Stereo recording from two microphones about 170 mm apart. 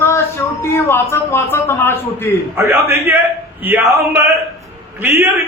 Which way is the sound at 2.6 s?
15° right (ahead or behind).